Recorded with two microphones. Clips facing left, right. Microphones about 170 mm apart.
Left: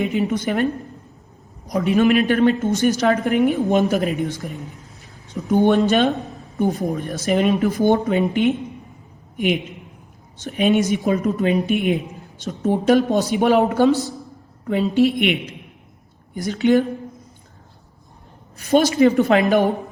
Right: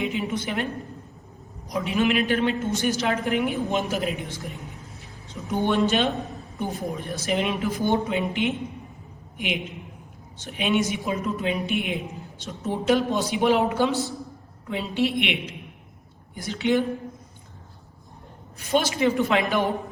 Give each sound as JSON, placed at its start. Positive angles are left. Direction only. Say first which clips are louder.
{"t": 0.0, "sound": "a woman's voice", "louder": "left 6 dB", "side_deg": 45}
{"t": 5.5, "sound": "a woman's voice", "louder": "left 7 dB", "side_deg": 50}
{"t": 10.4, "sound": "a woman's voice", "louder": "left 6 dB", "side_deg": 45}
{"t": 18.7, "sound": "a woman's voice", "louder": "left 7 dB", "side_deg": 45}